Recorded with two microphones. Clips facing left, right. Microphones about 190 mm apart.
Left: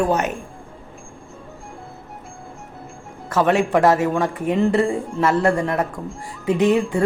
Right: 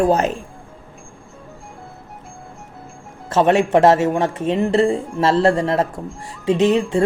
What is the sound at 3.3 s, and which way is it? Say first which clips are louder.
Speech: right 3 dB; 25° right (ahead or behind).